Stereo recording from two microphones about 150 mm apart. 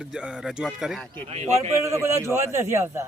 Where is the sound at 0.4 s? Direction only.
Centre (ahead or behind).